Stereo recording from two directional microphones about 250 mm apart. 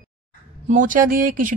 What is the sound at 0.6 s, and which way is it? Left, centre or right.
Speech, right.